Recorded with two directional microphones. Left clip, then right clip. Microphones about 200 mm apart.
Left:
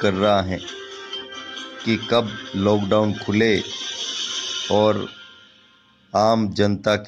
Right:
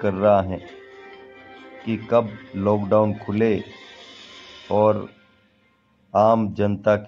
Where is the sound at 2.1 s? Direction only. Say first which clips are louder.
Right 3 dB; 25° left (ahead or behind).